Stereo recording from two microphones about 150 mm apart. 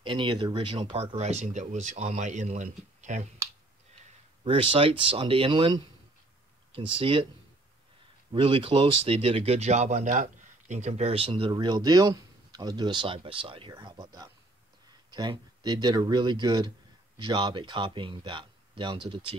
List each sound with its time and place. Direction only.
0.0 s speech: 30° right (ahead or behind); by 3.3 s 50° right (ahead or behind)
4.0 s speech: 40° right (ahead or behind)
8.3 s speech: 35° right (ahead or behind)